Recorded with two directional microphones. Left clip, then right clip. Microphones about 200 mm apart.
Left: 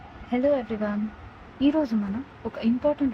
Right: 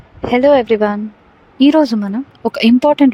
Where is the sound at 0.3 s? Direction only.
55° right (ahead or behind).